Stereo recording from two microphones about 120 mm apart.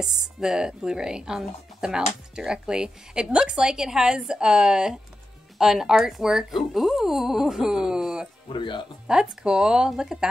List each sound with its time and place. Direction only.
0.0 s speech: 5° right (ahead or behind)
8.5 s speech: 40° left (ahead or behind)
9.0 s speech: 5° right (ahead or behind)